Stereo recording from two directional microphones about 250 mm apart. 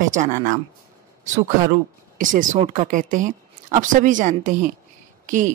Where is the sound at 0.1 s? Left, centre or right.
Right.